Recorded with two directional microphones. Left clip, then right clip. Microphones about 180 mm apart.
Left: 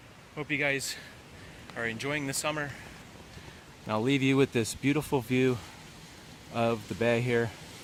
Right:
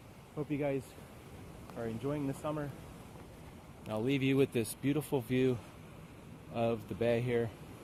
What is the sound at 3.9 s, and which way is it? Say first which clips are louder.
Speech: left 6 dB; 35° left (ahead or behind).